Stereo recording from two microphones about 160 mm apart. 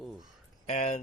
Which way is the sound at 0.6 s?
40° left (ahead or behind).